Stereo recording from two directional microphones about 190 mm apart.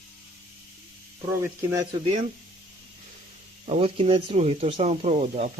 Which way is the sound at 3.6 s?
30° right (ahead or behind).